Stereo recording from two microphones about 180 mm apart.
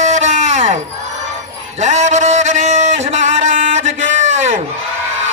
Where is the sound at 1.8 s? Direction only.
40° right (ahead or behind).